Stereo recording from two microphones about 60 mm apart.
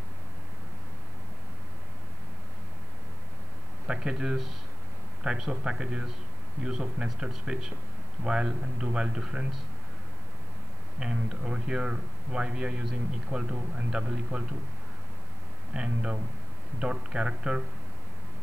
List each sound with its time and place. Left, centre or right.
3.8 s speech: centre
11.0 s speech: centre
15.7 s speech: centre